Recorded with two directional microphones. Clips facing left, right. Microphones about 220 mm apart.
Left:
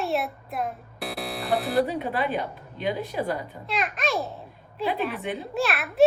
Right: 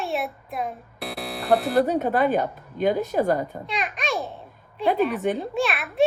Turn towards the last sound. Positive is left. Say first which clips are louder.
# right 2 dB
turn(degrees=0)  # may be behind; listen again after turning